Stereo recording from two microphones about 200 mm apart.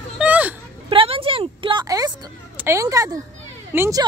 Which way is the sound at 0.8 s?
25° right (ahead or behind).